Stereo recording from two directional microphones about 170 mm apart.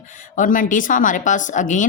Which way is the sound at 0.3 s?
50° left (ahead or behind).